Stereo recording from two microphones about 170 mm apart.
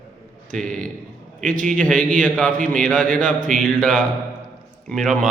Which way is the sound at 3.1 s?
50° right (ahead or behind).